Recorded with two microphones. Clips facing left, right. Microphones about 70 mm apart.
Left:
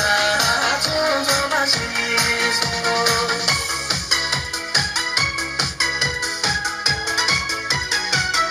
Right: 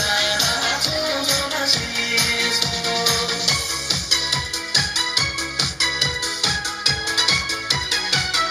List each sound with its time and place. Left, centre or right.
0.0 s music: left